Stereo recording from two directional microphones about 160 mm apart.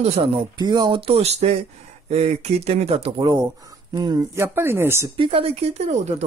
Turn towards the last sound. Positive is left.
turn(degrees=-45)  # may be behind; listen again after turning